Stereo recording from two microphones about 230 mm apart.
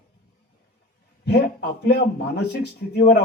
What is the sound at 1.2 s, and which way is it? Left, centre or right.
A man's voice, left.